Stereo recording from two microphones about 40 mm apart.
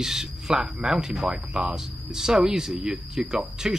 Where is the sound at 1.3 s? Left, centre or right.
Right.